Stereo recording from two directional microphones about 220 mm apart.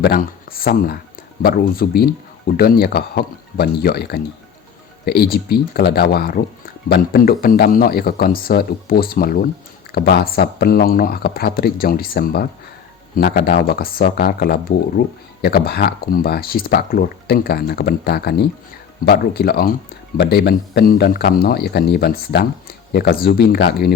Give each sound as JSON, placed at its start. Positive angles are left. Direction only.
{"t": 0.0, "sound": "speech", "side_deg": 40}